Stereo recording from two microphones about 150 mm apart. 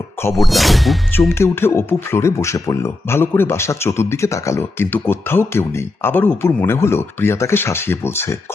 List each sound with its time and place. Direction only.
0.2 s speech: 15° left (ahead or behind)
0.4 s speech: centre (ahead or behind)
1.3 s speech: 15° left (ahead or behind)